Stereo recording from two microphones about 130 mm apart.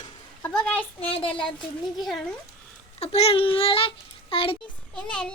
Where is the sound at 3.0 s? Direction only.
50° left (ahead or behind).